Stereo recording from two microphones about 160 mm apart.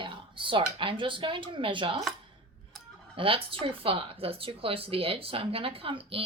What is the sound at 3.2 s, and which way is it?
Speech, 35° right (ahead or behind).